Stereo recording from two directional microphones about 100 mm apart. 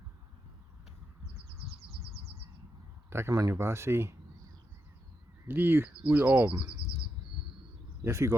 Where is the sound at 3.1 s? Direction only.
25° right (ahead or behind).